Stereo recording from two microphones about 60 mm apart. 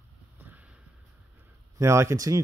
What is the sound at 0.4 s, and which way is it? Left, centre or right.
Vehicle, right.